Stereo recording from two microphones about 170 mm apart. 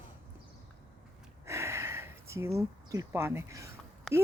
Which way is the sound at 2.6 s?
20° right (ahead or behind).